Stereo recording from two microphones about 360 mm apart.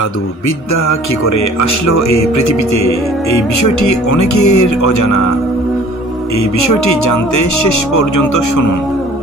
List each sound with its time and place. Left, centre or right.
0.7 s speech: left
4.1 s speech: left